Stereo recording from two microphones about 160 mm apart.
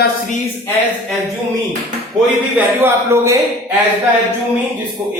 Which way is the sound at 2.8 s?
20° right (ahead or behind).